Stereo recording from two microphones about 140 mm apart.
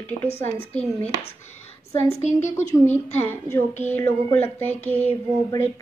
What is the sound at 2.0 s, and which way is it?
Speech, 55° left (ahead or behind).